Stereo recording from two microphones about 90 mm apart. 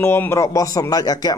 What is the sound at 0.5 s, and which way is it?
Speech, 40° left (ahead or behind).